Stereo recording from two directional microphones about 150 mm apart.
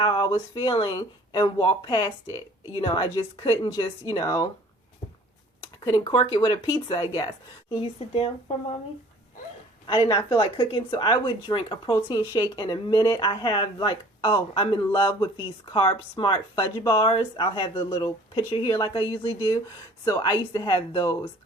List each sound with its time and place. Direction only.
0.0 s speech: 30° left (ahead or behind)
5.8 s speech: 30° left (ahead or behind)
9.8 s a woman's voice: 30° left (ahead or behind)